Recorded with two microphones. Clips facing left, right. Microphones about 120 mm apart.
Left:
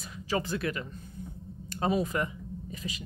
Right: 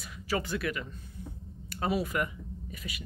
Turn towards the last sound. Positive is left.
turn(degrees=30)  # may be behind; listen again after turning